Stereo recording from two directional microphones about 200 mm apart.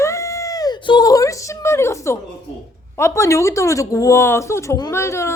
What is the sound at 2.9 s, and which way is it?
Speech, 15° left (ahead or behind).